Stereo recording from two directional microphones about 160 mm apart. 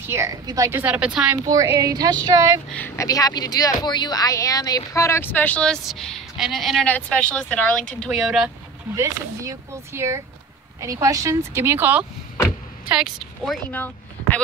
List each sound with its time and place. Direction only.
0.0 s a woman's voice: 15° right (ahead or behind)
1.4 s speech: 20° right (ahead or behind)
2.7 s speech: 10° left (ahead or behind)
3.1 s speech: 25° left (ahead or behind); by 8.5 s centre (ahead or behind)
8.9 s a woman's voice: 20° right (ahead or behind); by 14.4 s 10° left (ahead or behind)